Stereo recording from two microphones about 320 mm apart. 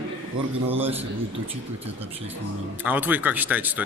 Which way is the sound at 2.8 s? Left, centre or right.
Centre.